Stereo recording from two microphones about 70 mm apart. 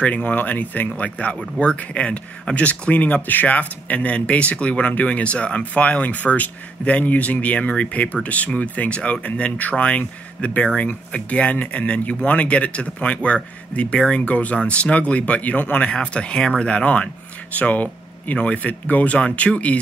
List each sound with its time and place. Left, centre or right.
0.0 s speech: left